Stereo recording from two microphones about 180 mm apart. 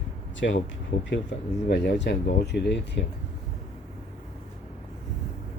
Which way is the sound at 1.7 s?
70° left (ahead or behind).